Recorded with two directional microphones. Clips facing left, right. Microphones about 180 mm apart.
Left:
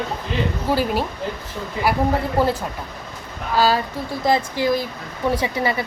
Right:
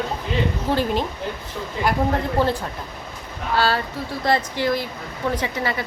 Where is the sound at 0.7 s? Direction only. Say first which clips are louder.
Left 2 dB; 10° left (ahead or behind).